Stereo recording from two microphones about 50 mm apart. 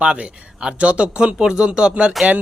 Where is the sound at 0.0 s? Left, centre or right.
Right.